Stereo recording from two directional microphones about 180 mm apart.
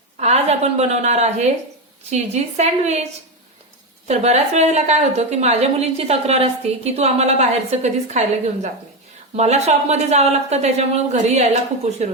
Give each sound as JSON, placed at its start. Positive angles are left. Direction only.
{"t": 0.2, "sound": "a woman's voice", "side_deg": -35}
{"t": 9.3, "sound": "a woman's voice", "side_deg": -40}